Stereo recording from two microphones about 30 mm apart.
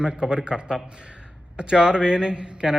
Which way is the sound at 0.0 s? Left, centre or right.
Right.